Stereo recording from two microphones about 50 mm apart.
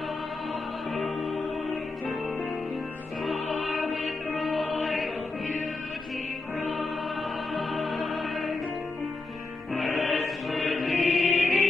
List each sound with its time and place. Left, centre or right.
0.9 s music: centre
3.3 s music: centre
7.5 s music: centre
9.8 s music: centre